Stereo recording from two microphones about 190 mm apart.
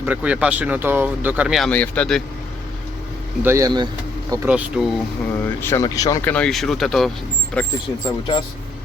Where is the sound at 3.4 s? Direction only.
15° right (ahead or behind).